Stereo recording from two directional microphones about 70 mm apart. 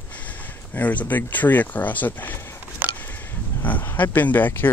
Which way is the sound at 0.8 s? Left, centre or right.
Left.